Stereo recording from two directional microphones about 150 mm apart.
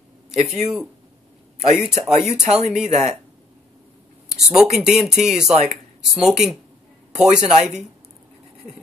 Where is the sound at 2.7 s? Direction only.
5° right (ahead or behind).